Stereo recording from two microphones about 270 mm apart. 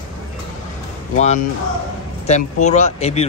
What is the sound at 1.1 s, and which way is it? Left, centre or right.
Speech, left.